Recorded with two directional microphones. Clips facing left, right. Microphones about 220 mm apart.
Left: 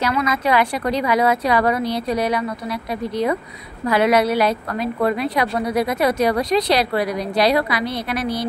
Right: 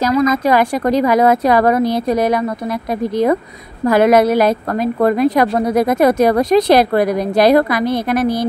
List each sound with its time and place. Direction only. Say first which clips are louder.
0.0 s a woman's voice: right 7 dB; 45° right (ahead or behind)
3.8 s a woman's voice: right 6 dB; 50° right (ahead or behind)